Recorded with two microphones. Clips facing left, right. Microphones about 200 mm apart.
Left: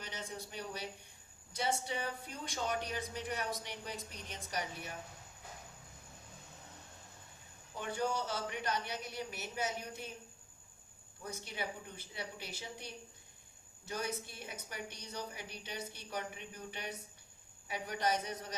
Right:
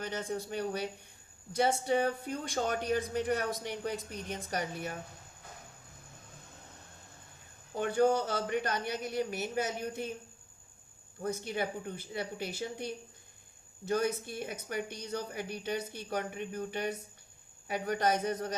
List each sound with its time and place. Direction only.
0.0 s speech: 50° right (ahead or behind)
7.7 s speech: 55° right (ahead or behind)
11.2 s speech: 55° right (ahead or behind)